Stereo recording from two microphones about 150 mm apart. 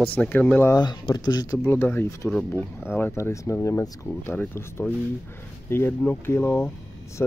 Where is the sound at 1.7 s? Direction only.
15° left (ahead or behind).